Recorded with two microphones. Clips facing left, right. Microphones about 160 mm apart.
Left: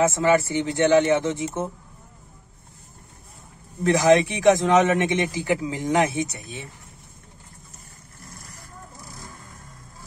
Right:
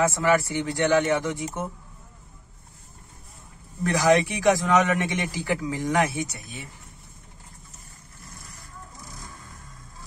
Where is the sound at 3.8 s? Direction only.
20° left (ahead or behind).